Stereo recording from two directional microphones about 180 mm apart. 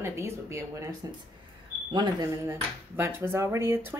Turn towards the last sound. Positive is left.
turn(degrees=-15)  # may be behind; listen again after turning